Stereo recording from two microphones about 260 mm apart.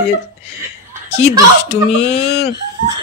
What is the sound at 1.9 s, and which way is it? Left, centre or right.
Speech, left.